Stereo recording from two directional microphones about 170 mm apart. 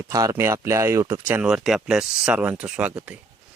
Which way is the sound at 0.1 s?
20° right (ahead or behind).